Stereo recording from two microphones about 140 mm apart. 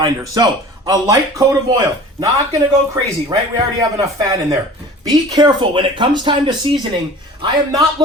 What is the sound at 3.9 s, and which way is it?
A man's voice, 30° right (ahead or behind).